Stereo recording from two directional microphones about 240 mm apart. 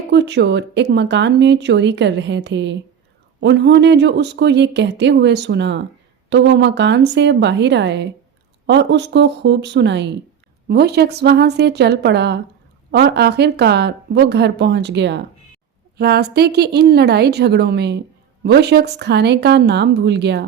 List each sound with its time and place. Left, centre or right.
0.1 s speech: right